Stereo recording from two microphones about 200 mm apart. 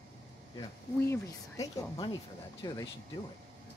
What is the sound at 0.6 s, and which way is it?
A woman's voice, 15° left (ahead or behind).